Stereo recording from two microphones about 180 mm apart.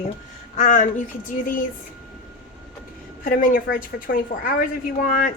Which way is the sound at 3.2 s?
50° left (ahead or behind).